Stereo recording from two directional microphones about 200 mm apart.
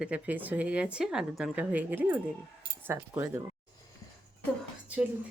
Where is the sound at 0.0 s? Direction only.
5° right (ahead or behind).